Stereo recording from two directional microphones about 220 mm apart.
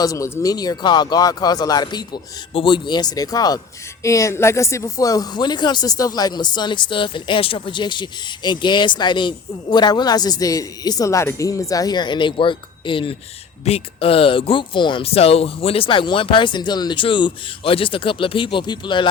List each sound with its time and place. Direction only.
0.0 s speech: 15° left (ahead or behind)